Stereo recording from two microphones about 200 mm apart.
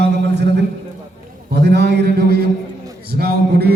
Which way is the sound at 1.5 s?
55° right (ahead or behind).